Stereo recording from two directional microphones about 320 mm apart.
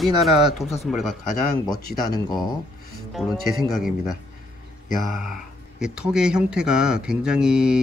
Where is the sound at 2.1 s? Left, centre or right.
Centre.